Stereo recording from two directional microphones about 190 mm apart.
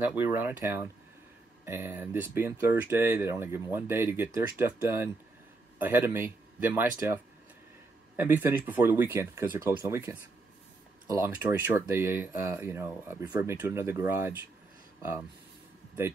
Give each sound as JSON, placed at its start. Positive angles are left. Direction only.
{"t": 0.1, "sound": "speech", "side_deg": -10}
{"t": 8.2, "sound": "speech", "side_deg": -10}